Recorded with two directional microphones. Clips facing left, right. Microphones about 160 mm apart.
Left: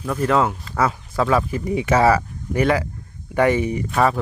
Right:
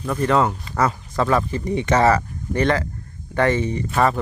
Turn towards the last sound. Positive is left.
turn(degrees=5)  # may be behind; listen again after turning